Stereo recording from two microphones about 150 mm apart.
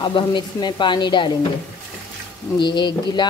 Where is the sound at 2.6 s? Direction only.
30° left (ahead or behind).